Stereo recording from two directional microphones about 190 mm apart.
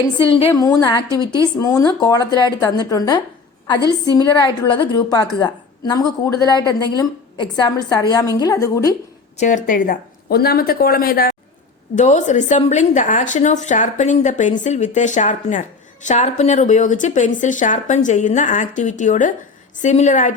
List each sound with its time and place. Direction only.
0.3 s a woman's voice: 30° left (ahead or behind)
1.0 s a woman's voice: 15° right (ahead or behind)
1.5 s a woman's voice: 20° left (ahead or behind)
4.2 s a woman's voice: 20° left (ahead or behind)
9.4 s a woman's voice: 40° left (ahead or behind)
11.9 s speech: 40° left (ahead or behind)